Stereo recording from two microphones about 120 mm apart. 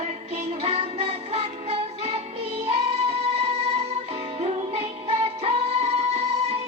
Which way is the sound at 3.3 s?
60° right (ahead or behind).